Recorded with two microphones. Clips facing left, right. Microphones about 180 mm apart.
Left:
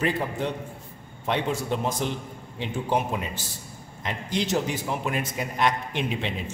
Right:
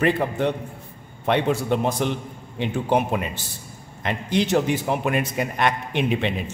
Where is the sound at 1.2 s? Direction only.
65° right (ahead or behind).